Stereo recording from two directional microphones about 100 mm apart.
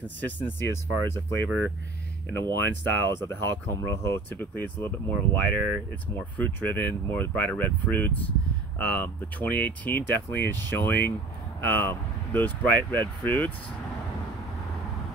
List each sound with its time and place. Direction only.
0.0 s speech: 20° left (ahead or behind)
3.1 s speech: 25° left (ahead or behind)